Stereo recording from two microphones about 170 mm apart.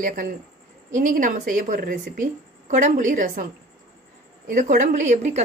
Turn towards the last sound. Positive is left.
turn(degrees=-45)  # may be behind; listen again after turning